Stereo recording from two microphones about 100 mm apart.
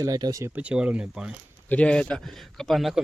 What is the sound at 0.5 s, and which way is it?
Speech, 10° right (ahead or behind).